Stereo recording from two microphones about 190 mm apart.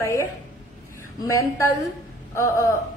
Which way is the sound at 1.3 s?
15° left (ahead or behind).